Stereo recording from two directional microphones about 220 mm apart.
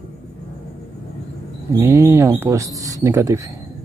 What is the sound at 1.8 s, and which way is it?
Speech, 10° right (ahead or behind).